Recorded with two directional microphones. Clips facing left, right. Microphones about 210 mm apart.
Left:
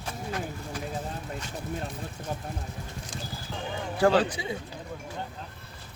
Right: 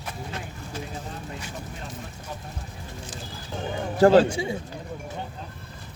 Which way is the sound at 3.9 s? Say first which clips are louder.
Right 6 dB; 40° right (ahead or behind).